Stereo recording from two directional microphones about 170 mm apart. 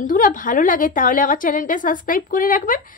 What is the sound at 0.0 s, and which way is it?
A woman's voice, 50° left (ahead or behind).